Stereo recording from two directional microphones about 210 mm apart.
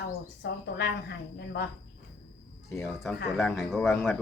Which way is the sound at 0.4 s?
55° left (ahead or behind).